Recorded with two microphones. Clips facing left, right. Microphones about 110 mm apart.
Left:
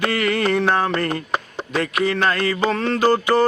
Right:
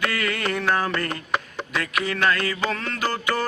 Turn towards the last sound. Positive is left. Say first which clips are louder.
# left 9 dB
turn(degrees=30)  # may be behind; listen again after turning